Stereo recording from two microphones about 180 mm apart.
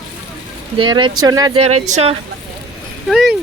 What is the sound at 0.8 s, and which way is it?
Speech, 25° right (ahead or behind).